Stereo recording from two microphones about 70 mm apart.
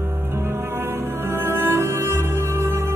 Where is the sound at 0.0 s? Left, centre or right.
Right.